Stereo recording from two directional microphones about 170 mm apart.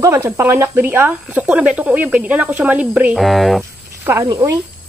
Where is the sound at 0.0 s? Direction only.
15° right (ahead or behind); by 3.6 s centre (ahead or behind).